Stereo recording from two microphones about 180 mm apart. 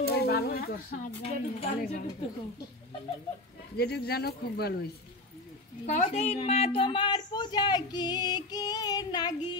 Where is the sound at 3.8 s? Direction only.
60° left (ahead or behind).